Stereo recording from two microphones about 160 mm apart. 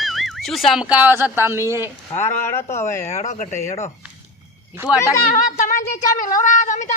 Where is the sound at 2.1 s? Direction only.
15° left (ahead or behind).